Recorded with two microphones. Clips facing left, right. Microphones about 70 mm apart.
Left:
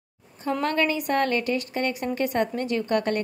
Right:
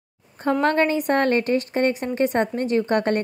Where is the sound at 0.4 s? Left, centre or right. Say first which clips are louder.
Right 5 dB; right.